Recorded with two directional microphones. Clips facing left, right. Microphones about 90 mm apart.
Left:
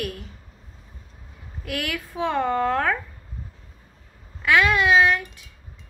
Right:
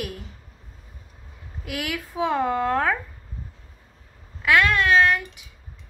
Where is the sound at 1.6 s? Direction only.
5° right (ahead or behind).